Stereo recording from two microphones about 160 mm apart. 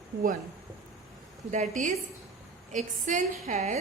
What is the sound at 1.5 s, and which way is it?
A woman's voice, 50° right (ahead or behind).